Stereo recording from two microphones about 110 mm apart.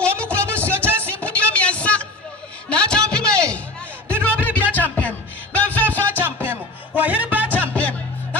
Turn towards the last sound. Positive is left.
turn(degrees=-15)  # may be behind; listen again after turning